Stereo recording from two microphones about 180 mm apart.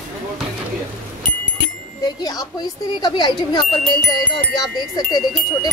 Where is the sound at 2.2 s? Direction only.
20° left (ahead or behind).